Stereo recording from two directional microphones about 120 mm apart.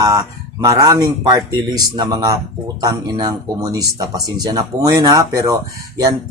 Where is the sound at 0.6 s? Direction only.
30° right (ahead or behind).